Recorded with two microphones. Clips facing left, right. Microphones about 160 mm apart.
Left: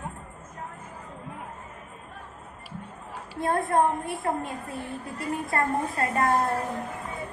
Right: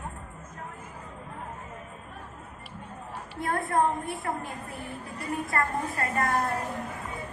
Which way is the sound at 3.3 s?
25° left (ahead or behind).